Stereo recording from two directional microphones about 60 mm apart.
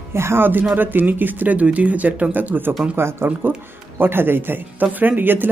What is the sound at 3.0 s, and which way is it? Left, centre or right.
Speech, right.